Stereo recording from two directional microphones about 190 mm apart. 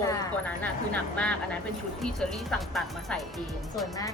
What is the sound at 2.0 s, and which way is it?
Speech, 5° left (ahead or behind).